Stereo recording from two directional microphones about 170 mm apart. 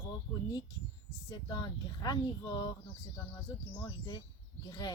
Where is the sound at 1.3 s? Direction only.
25° left (ahead or behind).